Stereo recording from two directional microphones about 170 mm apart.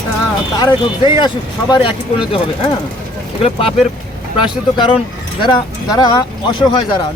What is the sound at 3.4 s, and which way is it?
Speech, 30° left (ahead or behind).